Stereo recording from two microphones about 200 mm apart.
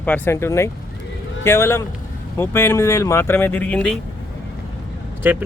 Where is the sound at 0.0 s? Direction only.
10° left (ahead or behind).